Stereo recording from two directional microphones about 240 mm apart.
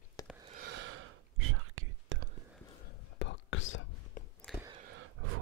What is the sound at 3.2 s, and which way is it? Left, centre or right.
Whispering, left.